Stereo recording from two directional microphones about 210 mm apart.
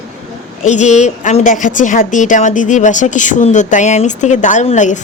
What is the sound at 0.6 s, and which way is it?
A woman's voice, 35° left (ahead or behind).